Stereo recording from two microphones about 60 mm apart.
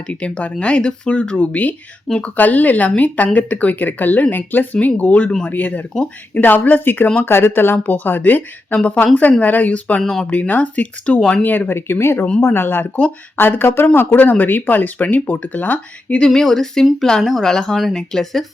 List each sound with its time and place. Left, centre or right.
0.1 s speech: centre
10.0 s speech: centre
10.2 s speech: left
16.1 s speech: centre